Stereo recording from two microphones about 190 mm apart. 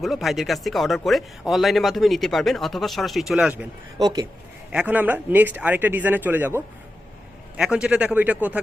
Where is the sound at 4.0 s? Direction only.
20° right (ahead or behind).